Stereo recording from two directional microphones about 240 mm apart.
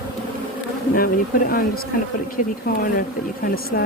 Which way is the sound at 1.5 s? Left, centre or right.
Left.